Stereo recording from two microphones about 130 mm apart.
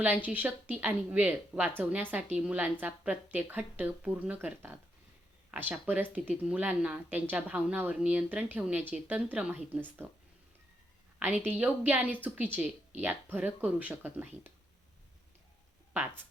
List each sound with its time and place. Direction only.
0.3 s a woman's voice: 10° right (ahead or behind)
11.2 s a woman's voice: 15° right (ahead or behind)
15.9 s speech: 15° right (ahead or behind)